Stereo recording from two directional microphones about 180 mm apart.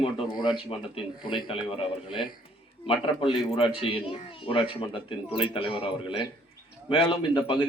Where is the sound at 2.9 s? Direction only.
30° left (ahead or behind).